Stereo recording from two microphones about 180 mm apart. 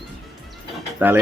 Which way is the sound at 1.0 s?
10° right (ahead or behind).